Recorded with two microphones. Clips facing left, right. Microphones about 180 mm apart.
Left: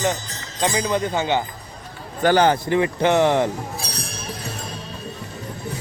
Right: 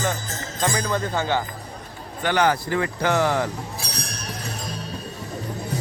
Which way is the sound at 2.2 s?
30° left (ahead or behind).